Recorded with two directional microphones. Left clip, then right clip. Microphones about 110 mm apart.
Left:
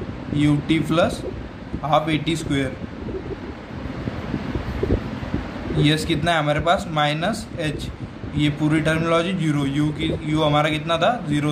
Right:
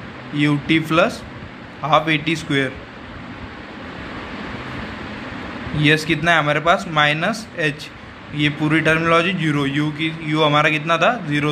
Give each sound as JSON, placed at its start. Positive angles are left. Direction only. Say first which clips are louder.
{"t": 0.4, "sound": "a man's voice", "louder": "right 3 dB", "side_deg": -15}
{"t": 5.8, "sound": "a man's voice", "louder": "right 4 dB", "side_deg": -15}